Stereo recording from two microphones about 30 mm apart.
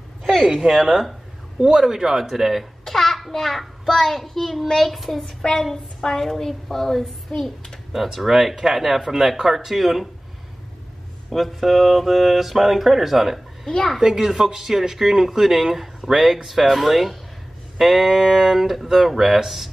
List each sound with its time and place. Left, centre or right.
0.6 s speech: centre
2.8 s a child's voice: centre
7.9 s speech: centre
11.3 s speech: centre
13.7 s a child's voice: left
14.0 s speech: centre